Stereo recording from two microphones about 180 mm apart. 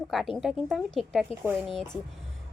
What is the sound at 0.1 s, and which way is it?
Speech, centre (ahead or behind).